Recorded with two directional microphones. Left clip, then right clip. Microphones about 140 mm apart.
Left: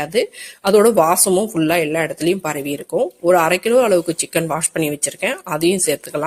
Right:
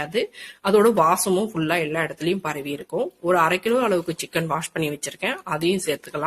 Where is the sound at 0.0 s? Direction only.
40° left (ahead or behind).